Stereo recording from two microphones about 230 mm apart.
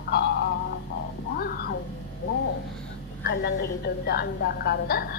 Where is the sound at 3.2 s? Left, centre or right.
Left.